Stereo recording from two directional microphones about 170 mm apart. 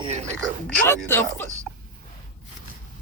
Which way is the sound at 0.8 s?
15° left (ahead or behind).